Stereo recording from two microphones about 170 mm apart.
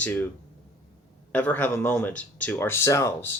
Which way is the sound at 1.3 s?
10° left (ahead or behind).